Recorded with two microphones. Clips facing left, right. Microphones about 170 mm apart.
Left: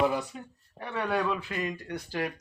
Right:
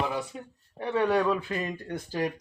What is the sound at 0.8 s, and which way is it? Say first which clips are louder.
Speech: right 5 dB; 30° right (ahead or behind).